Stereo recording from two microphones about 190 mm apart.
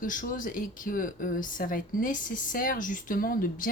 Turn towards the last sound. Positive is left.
turn(degrees=50)  # may be behind; listen again after turning